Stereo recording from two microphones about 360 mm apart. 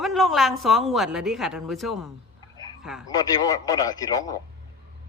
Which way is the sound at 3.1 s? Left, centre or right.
Centre.